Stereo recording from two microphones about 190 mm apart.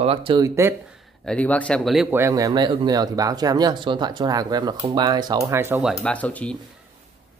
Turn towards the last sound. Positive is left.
turn(degrees=10)  # may be behind; listen again after turning